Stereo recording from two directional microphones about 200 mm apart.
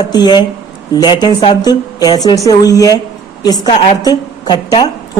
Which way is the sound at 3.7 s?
30° left (ahead or behind).